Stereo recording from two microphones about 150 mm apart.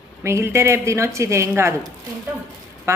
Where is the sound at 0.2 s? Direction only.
15° right (ahead or behind).